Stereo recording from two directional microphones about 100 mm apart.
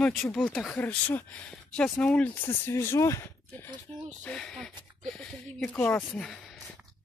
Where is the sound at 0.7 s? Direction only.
20° left (ahead or behind).